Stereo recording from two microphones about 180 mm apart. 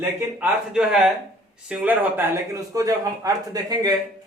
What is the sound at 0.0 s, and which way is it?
A man's voice, 5° right (ahead or behind).